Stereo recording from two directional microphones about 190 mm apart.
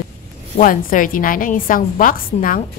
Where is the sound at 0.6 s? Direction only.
45° left (ahead or behind).